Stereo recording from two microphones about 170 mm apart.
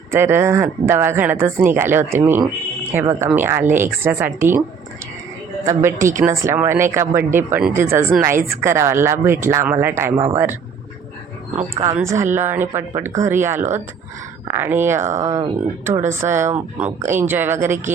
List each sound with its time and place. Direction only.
0.1 s speech: 15° right (ahead or behind)
5.6 s speech: 15° right (ahead or behind)
11.5 s speech: 40° right (ahead or behind)
11.9 s speech: 15° right (ahead or behind)
13.6 s speech: 45° right (ahead or behind)
14.4 s speech: 15° right (ahead or behind)